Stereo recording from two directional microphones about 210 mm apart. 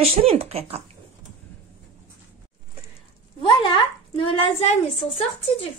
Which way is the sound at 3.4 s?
25° left (ahead or behind).